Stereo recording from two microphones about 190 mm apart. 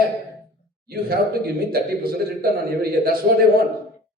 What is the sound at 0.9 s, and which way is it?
A man's voice, 55° right (ahead or behind).